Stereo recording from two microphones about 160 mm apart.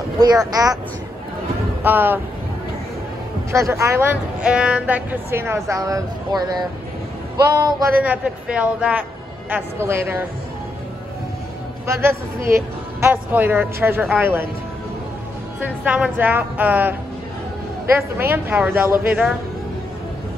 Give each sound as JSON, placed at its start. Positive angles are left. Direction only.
{"t": 0.2, "sound": "speech", "side_deg": -25}
{"t": 1.8, "sound": "speech", "side_deg": -15}
{"t": 3.5, "sound": "speech", "side_deg": -20}
{"t": 8.0, "sound": "speech", "side_deg": -10}
{"t": 11.8, "sound": "speech", "side_deg": -15}
{"t": 15.6, "sound": "speech", "side_deg": -10}
{"t": 17.9, "sound": "speech", "side_deg": -15}